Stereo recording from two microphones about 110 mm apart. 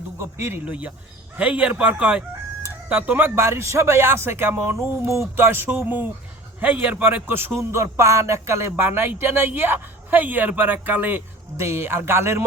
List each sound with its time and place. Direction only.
0.2 s a man's voice: 25° right (ahead or behind)